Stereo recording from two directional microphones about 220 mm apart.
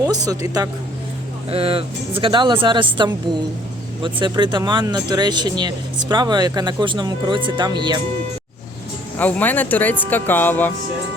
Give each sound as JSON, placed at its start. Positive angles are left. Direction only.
{"t": 0.0, "sound": "speech", "side_deg": -15}
{"t": 9.1, "sound": "speech", "side_deg": 5}